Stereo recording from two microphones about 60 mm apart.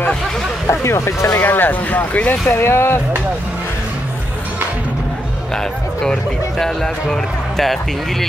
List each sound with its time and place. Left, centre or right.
0.7 s speech: left
1.4 s speech: left
2.4 s speech: left
6.6 s speech: centre